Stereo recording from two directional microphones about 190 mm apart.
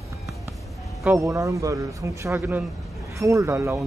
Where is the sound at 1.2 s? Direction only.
15° right (ahead or behind).